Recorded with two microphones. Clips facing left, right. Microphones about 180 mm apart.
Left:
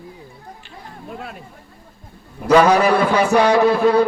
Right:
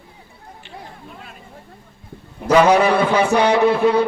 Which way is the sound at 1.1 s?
50° left (ahead or behind).